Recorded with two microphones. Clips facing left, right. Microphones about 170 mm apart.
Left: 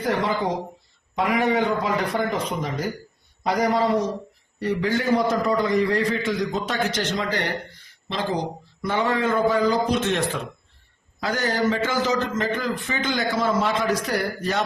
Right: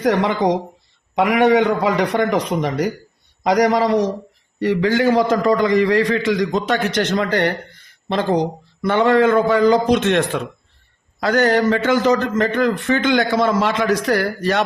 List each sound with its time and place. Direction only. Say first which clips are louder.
0.0 s a man's voice: right 6 dB; 85° right